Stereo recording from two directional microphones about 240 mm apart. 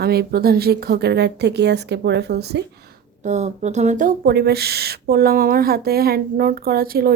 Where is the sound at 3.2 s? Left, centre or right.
Right.